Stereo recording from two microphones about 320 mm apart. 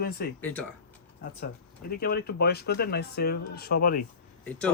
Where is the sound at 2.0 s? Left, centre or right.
Left.